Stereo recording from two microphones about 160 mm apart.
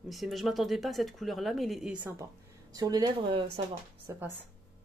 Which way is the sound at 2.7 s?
25° right (ahead or behind).